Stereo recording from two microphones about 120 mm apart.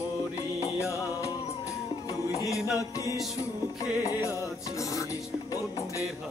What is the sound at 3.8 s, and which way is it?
Music, 25° left (ahead or behind).